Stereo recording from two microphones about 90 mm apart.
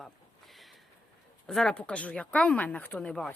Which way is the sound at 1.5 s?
5° left (ahead or behind).